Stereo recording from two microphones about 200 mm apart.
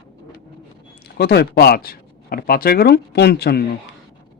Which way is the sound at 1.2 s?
55° left (ahead or behind).